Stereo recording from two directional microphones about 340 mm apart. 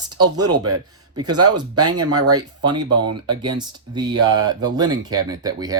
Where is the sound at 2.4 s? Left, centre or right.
Centre.